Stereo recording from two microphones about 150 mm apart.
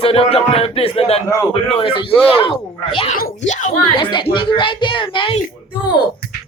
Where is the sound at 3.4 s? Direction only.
50° left (ahead or behind).